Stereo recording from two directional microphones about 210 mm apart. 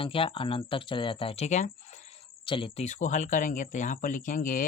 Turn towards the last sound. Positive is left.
turn(degrees=40)  # may be behind; listen again after turning